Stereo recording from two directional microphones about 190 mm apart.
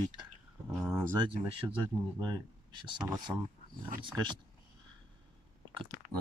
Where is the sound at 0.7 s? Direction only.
Centre (ahead or behind).